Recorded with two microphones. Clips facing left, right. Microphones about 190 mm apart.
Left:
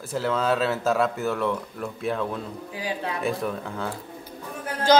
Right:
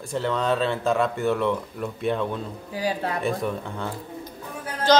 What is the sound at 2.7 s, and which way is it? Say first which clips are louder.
Speech: right 4 dB; 40° right (ahead or behind).